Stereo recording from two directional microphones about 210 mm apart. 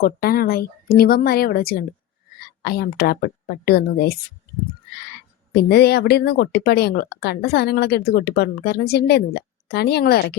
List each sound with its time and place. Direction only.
0.0 s speech: 45° left (ahead or behind)
5.6 s speech: 50° left (ahead or behind)